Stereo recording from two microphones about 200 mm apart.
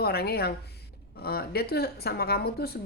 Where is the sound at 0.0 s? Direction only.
50° left (ahead or behind).